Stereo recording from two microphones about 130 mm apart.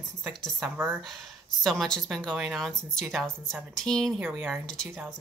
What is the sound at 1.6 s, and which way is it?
Speech, 5° left (ahead or behind).